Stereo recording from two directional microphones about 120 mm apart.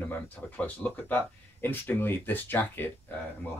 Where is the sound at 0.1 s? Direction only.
10° left (ahead or behind).